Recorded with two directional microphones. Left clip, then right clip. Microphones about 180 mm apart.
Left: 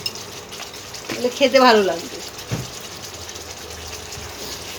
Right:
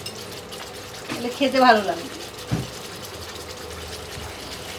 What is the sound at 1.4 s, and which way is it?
Speech, 65° left (ahead or behind).